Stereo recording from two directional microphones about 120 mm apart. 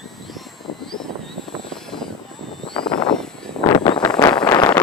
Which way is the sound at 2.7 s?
40° left (ahead or behind).